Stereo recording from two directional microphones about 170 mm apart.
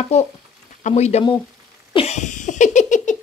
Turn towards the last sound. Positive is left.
turn(degrees=45)  # may be behind; listen again after turning